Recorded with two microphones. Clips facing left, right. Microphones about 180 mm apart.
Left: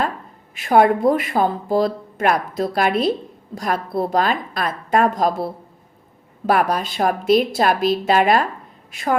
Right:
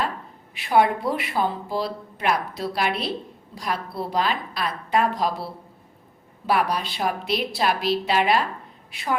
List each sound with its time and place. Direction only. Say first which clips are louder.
0.5 s a woman's voice: left 5 dB; 45° left (ahead or behind)